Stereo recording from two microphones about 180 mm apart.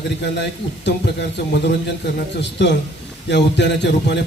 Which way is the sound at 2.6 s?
75° left (ahead or behind).